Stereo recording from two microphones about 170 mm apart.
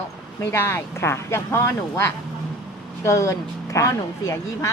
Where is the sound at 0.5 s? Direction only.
15° left (ahead or behind).